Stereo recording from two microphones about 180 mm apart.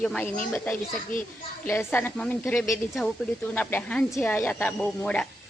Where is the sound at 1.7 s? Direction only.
10° left (ahead or behind).